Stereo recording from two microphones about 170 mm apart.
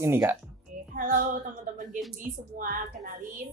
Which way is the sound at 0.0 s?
15° right (ahead or behind).